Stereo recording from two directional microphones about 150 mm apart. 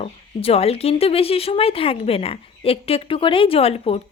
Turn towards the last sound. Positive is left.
turn(degrees=40)  # may be behind; listen again after turning